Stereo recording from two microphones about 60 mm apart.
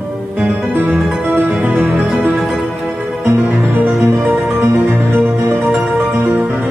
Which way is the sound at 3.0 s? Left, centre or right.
Centre.